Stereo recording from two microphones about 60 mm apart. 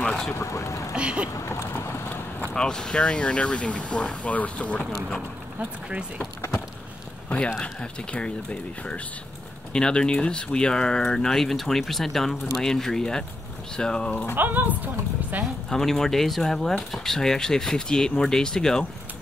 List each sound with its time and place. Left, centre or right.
0.0 s vehicle: centre
0.3 s speech: left
0.9 s speech: centre
1.3 s a sound: left
2.5 s speech: centre
5.6 s speech: centre
7.2 s speech: centre
14.3 s speech: right
15.7 s speech: centre